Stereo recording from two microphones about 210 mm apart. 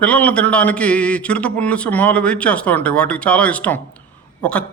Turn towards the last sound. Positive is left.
turn(degrees=5)  # may be behind; listen again after turning